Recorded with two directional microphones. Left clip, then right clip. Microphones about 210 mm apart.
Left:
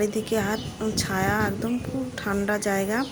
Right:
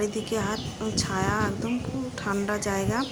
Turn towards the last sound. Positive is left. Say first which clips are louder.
# left 2 dB
turn(degrees=15)  # may be behind; listen again after turning